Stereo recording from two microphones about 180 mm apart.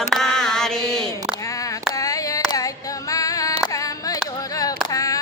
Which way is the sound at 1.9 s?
20° left (ahead or behind).